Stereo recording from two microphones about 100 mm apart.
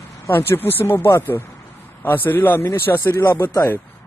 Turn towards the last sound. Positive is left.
turn(degrees=25)  # may be behind; listen again after turning